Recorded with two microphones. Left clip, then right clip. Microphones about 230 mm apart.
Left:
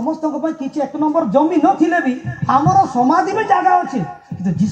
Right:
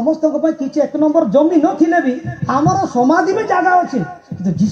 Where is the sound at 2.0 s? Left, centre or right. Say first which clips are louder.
Right 2 dB; left.